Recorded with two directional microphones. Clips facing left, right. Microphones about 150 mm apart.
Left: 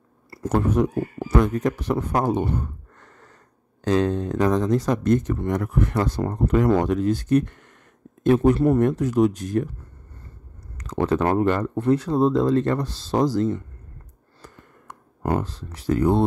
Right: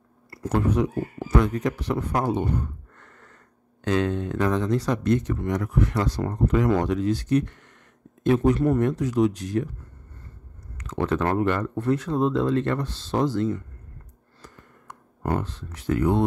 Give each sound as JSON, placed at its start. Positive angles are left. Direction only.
{"t": 0.4, "sound": "speech", "side_deg": 45}
{"t": 3.0, "sound": "a sound", "side_deg": 35}
{"t": 3.8, "sound": "speech", "side_deg": 35}
{"t": 8.5, "sound": "speech", "side_deg": 30}
{"t": 8.8, "sound": "speech", "side_deg": 50}
{"t": 10.8, "sound": "speech", "side_deg": 35}
{"t": 15.2, "sound": "speech", "side_deg": 35}